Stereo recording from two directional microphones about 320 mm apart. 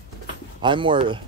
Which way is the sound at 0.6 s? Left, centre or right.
Centre.